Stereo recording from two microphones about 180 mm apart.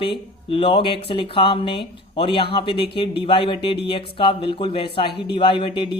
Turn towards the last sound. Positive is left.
turn(degrees=25)  # may be behind; listen again after turning